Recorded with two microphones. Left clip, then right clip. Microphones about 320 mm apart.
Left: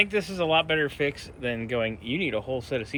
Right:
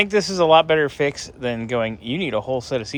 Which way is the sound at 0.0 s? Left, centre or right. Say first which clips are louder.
Right 7 dB; centre.